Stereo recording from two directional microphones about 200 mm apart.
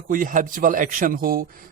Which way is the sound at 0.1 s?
40° right (ahead or behind).